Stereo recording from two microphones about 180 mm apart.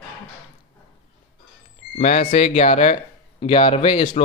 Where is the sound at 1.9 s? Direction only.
40° left (ahead or behind).